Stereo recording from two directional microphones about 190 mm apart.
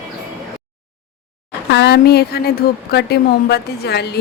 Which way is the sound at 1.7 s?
60° left (ahead or behind).